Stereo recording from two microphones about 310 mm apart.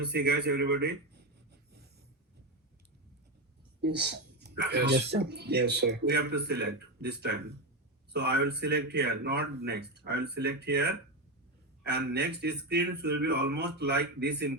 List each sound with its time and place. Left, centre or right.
0.0 s speech: right
3.8 s speech: right